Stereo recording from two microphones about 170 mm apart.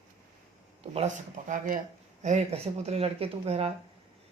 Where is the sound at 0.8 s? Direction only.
40° right (ahead or behind).